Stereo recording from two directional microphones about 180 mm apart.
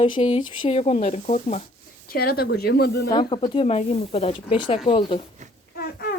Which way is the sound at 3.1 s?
25° left (ahead or behind).